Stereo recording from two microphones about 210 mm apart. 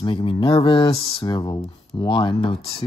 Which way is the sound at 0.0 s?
25° left (ahead or behind).